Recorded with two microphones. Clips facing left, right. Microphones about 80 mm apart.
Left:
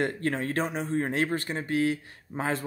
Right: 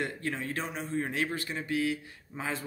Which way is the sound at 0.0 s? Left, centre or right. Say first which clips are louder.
Left 6 dB; left.